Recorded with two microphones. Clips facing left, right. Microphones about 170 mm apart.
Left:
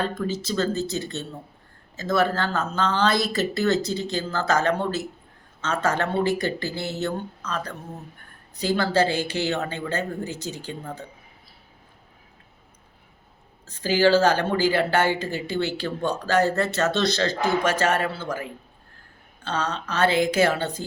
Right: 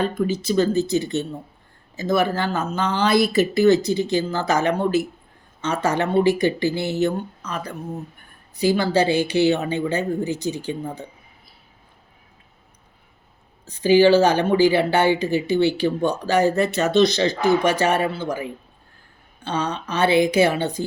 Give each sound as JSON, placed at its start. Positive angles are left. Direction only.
{"t": 0.0, "sound": "a woman's voice", "side_deg": -10}
{"t": 13.7, "sound": "a woman's voice", "side_deg": -15}